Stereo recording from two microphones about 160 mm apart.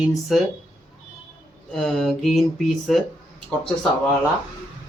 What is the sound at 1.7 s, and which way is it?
Speech, centre (ahead or behind).